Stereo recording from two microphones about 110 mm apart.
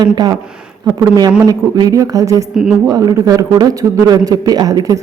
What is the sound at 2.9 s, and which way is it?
A woman's voice, 35° right (ahead or behind).